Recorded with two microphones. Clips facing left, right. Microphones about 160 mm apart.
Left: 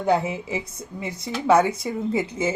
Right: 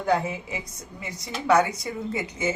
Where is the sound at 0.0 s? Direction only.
25° left (ahead or behind).